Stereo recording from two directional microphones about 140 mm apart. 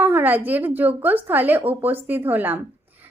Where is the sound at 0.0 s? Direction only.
15° right (ahead or behind).